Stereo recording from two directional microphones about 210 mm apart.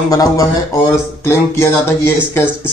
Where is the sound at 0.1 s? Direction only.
15° left (ahead or behind).